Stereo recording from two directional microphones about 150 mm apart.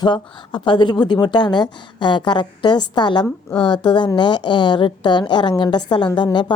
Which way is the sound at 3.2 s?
5° left (ahead or behind).